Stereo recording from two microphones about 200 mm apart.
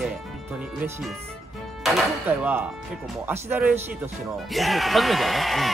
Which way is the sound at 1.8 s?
5° right (ahead or behind).